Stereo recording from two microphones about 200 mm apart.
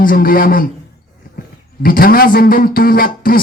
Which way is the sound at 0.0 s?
45° left (ahead or behind).